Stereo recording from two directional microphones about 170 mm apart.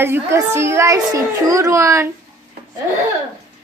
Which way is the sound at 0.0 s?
15° right (ahead or behind).